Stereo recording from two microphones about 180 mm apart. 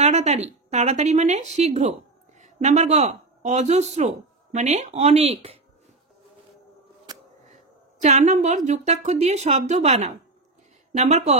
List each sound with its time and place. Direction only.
0.0 s a woman's voice: 40° right (ahead or behind)
7.1 s a sound: 20° right (ahead or behind)
7.4 s speech: 45° right (ahead or behind)